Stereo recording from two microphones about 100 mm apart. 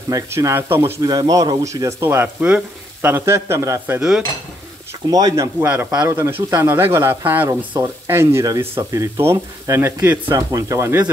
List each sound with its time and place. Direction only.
0.1 s speech: 30° right (ahead or behind)
1.0 s speech: 40° right (ahead or behind)
2.0 s speech: 20° right (ahead or behind)
5.0 s speech: 40° right (ahead or behind); by 7.4 s 20° right (ahead or behind)
7.7 s speech: 35° right (ahead or behind)
10.3 s speech: 30° right (ahead or behind)